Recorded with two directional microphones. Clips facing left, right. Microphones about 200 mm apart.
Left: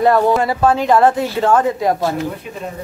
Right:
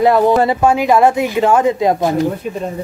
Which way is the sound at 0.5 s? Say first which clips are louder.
Right 1 dB; 10° right (ahead or behind).